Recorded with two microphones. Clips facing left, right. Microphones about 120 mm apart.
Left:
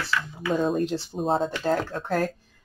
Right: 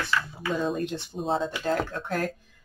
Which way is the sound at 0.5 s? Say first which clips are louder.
Left 4 dB; 45° left (ahead or behind).